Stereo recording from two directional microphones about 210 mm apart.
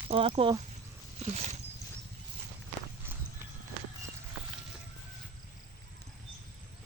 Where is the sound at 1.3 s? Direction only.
35° right (ahead or behind).